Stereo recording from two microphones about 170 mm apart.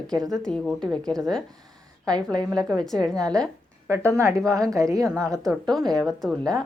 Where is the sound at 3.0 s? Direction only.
5° left (ahead or behind).